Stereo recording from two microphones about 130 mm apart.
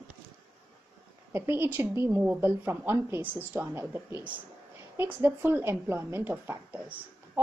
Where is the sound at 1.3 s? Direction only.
20° right (ahead or behind).